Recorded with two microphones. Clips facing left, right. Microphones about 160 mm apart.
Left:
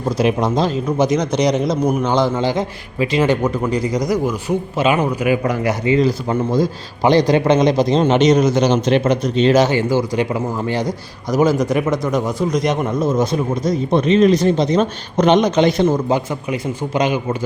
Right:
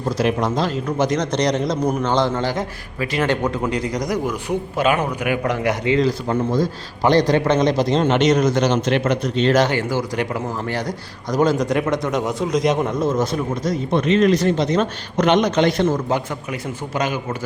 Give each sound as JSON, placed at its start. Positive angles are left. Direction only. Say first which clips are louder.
{"t": 0.2, "sound": "speech", "louder": "left 3 dB", "side_deg": 15}
{"t": 3.4, "sound": "a man's voice", "louder": "left 3 dB", "side_deg": 0}
{"t": 13.0, "sound": "speech", "louder": "left 2 dB", "side_deg": 10}
{"t": 13.7, "sound": "speech", "louder": "left 3 dB", "side_deg": 25}
{"t": 15.2, "sound": "speech", "louder": "left 3 dB", "side_deg": 30}
{"t": 15.4, "sound": "speech", "louder": "left 3 dB", "side_deg": 10}